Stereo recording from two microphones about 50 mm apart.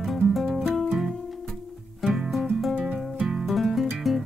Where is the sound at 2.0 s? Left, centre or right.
Centre.